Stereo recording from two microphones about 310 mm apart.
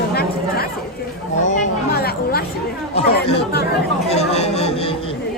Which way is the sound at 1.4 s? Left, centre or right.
Left.